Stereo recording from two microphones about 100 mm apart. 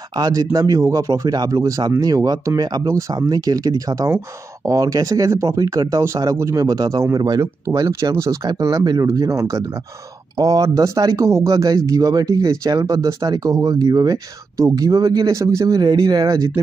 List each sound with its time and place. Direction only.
0.1 s speech: 40° right (ahead or behind)